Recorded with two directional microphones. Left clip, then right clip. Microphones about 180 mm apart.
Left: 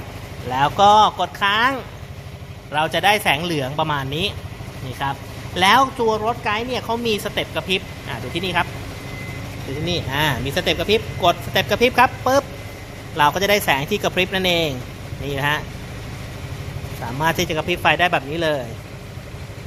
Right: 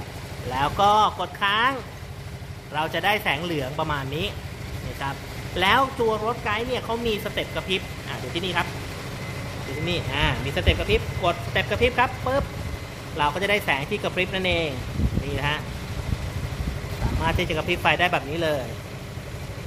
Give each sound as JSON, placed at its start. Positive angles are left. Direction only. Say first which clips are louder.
{"t": 0.5, "sound": "speech", "louder": "left 6 dB", "side_deg": 45}
{"t": 9.8, "sound": "speech", "louder": "left 4 dB", "side_deg": 50}
{"t": 17.2, "sound": "speech", "louder": "left 4 dB", "side_deg": 45}